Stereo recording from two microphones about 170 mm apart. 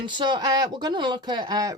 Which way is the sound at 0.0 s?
25° right (ahead or behind).